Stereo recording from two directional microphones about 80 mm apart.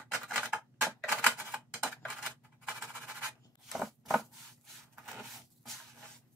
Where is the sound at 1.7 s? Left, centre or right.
Centre.